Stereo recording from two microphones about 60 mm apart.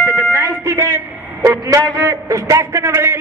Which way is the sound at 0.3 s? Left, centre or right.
Right.